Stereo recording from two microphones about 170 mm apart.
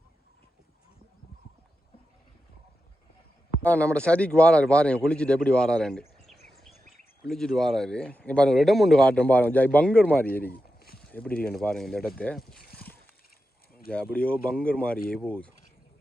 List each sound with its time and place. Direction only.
3.6 s speech: 10° left (ahead or behind)
6.5 s bird vocalization: centre (ahead or behind)
7.3 s speech: centre (ahead or behind)
10.5 s a sound: 65° left (ahead or behind)
11.1 s speech: 10° left (ahead or behind)
13.9 s speech: 5° left (ahead or behind)